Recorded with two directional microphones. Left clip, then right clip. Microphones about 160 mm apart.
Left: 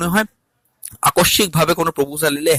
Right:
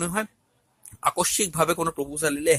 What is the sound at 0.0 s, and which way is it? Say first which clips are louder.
A man's voice: left 10 dB; 50° left (ahead or behind).